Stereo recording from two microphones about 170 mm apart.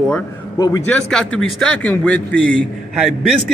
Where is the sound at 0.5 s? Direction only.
20° left (ahead or behind).